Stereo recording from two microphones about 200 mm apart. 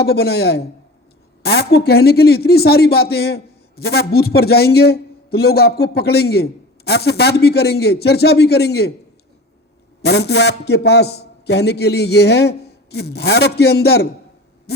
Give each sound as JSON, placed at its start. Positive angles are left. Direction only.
{"t": 0.0, "sound": "speech", "side_deg": 55}
{"t": 10.0, "sound": "a man's voice", "side_deg": 55}